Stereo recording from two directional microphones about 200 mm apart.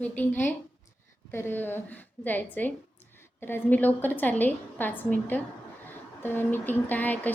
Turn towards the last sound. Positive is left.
turn(degrees=10)  # may be behind; listen again after turning